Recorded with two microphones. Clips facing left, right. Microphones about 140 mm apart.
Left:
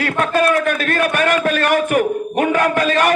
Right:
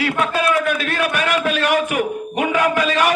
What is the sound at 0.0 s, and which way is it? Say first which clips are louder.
A man's voice: left 3 dB; 50° left (ahead or behind).